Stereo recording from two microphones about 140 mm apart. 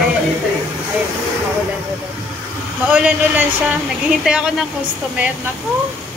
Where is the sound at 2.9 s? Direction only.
10° right (ahead or behind).